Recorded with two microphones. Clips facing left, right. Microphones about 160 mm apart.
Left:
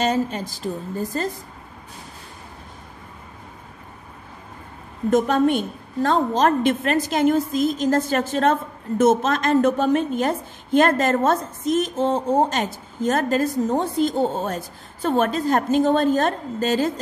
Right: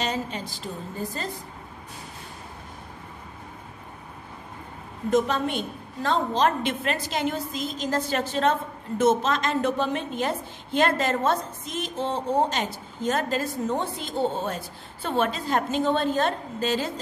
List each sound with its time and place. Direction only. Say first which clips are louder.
0.0 s a woman's voice: left 7 dB; 45° left (ahead or behind)
5.1 s a woman's voice: left 6 dB; 50° left (ahead or behind)